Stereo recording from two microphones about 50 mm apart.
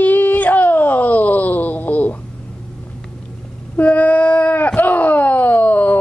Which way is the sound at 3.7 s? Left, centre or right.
Left.